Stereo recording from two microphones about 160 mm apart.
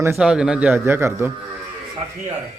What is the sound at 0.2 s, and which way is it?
Speech, 5° right (ahead or behind).